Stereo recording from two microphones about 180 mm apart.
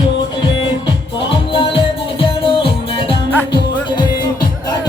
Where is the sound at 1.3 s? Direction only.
30° left (ahead or behind).